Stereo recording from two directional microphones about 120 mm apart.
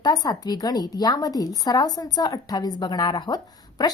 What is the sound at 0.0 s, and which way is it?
A woman's voice, 35° left (ahead or behind).